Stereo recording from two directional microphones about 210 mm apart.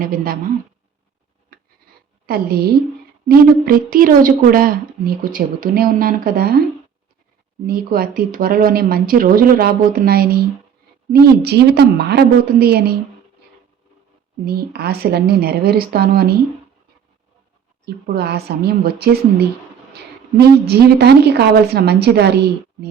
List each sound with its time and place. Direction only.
0.0 s a woman's voice: 40° right (ahead or behind)
2.2 s a woman's voice: 45° right (ahead or behind)
7.7 s a woman's voice: 45° right (ahead or behind)
14.4 s a woman's voice: 50° right (ahead or behind)
17.8 s a woman's voice: 50° right (ahead or behind)
20.4 s a woman's voice: 50° right (ahead or behind)